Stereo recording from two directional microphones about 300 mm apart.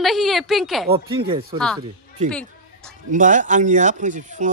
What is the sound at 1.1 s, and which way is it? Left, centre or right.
Speech, centre.